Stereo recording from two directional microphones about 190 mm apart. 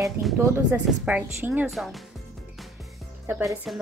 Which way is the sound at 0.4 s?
10° right (ahead or behind).